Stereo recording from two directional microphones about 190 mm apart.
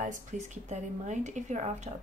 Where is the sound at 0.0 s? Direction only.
40° right (ahead or behind).